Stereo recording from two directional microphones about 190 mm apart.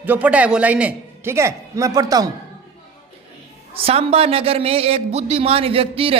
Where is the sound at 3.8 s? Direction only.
30° right (ahead or behind).